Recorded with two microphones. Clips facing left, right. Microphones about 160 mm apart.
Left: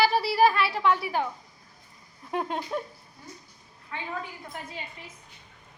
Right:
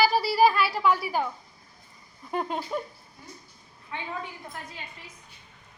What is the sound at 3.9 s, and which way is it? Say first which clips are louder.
Speech: right 1 dB; 20° right (ahead or behind).